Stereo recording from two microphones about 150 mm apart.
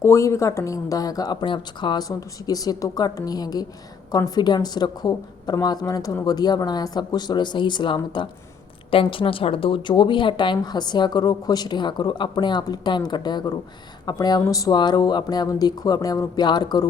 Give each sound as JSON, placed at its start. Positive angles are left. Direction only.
{"t": 0.0, "sound": "a woman's voice", "side_deg": 20}